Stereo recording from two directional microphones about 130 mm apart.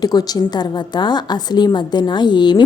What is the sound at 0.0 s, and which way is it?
A woman's voice, 30° left (ahead or behind).